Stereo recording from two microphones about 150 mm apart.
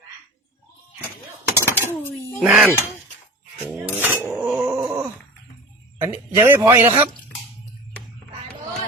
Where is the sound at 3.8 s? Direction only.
10° right (ahead or behind).